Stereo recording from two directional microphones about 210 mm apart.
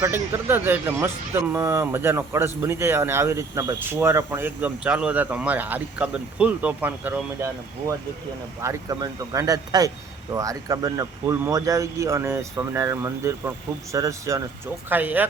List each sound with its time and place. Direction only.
0.0 s speech: 10° right (ahead or behind)
8.6 s speech: 15° right (ahead or behind)